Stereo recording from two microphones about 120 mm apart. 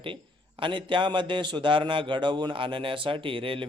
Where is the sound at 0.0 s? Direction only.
45° right (ahead or behind).